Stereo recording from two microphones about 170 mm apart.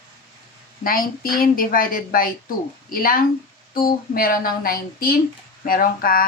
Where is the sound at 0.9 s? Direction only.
55° left (ahead or behind).